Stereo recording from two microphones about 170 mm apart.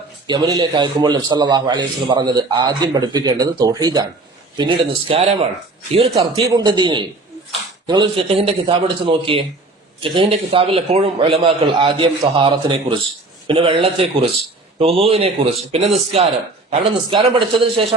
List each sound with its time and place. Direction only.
0.3 s a man's voice: 25° right (ahead or behind); by 17.0 s 40° right (ahead or behind)
17.1 s a man's voice: 30° right (ahead or behind)